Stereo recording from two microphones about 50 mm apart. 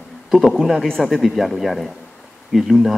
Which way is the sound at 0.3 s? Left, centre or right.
Centre.